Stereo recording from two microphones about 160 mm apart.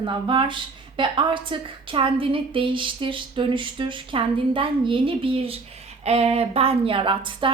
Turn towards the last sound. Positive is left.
turn(degrees=-30)  # may be behind; listen again after turning